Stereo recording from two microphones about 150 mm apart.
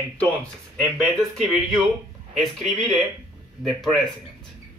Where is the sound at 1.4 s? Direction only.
Centre (ahead or behind).